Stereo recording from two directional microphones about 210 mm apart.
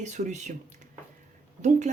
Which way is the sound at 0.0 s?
35° right (ahead or behind).